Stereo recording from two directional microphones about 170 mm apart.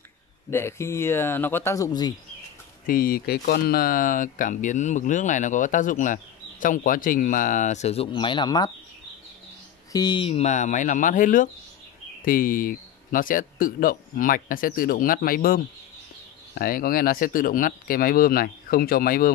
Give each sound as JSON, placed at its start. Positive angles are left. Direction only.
{"t": 0.5, "sound": "speech", "side_deg": 15}
{"t": 2.9, "sound": "speech", "side_deg": 60}
{"t": 9.9, "sound": "a man's voice", "side_deg": 25}